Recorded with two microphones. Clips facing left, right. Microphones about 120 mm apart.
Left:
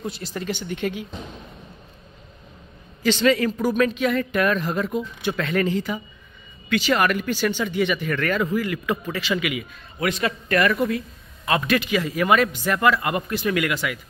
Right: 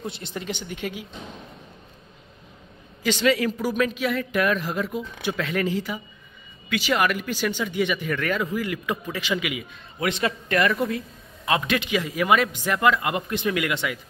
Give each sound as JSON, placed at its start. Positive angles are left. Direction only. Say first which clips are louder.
{"t": 0.0, "sound": "speech", "louder": "left 3 dB", "side_deg": -25}
{"t": 3.0, "sound": "speech", "louder": "left 2 dB", "side_deg": -15}